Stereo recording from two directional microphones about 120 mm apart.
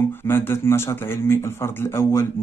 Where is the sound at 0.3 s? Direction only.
20° left (ahead or behind).